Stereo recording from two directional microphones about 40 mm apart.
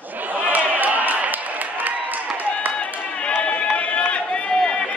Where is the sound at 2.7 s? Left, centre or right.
Left; by 4.9 s centre.